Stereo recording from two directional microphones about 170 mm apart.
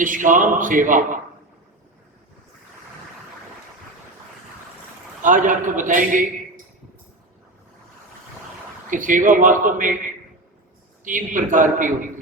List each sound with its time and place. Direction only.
0.0 s speech: 50° right (ahead or behind)
5.2 s speech: 50° right (ahead or behind)
8.9 s speech: 50° right (ahead or behind)
11.0 s speech: 50° right (ahead or behind)